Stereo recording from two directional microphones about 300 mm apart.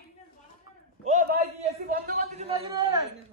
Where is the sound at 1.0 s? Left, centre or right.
Right.